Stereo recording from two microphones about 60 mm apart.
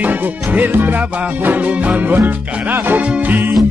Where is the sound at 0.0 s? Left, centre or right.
Right.